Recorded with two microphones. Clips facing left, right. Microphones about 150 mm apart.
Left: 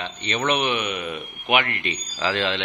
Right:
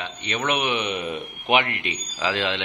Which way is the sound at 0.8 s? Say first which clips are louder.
Right 1 dB; 30° right (ahead or behind).